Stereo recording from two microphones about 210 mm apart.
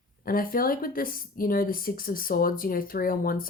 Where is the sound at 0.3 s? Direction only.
45° left (ahead or behind).